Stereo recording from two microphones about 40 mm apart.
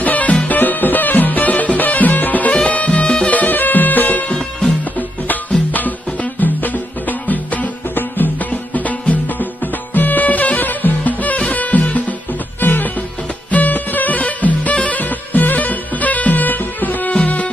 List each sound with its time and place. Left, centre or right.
0.0 s music: left
2.7 s music: left
3.3 s music: left
5.7 s music: left
12.5 s music: left
17.1 s music: left